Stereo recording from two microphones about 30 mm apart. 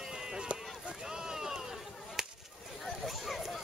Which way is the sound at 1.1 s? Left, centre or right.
Right.